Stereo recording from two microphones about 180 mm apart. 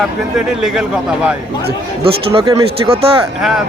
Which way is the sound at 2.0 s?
30° right (ahead or behind).